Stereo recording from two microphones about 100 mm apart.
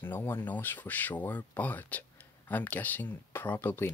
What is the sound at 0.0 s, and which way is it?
Speech, 20° left (ahead or behind).